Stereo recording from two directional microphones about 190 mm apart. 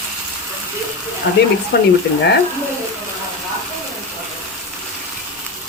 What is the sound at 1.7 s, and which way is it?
Speech, 60° left (ahead or behind).